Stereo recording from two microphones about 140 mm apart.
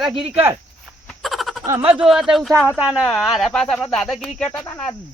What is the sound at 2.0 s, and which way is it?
Speech, 5° right (ahead or behind).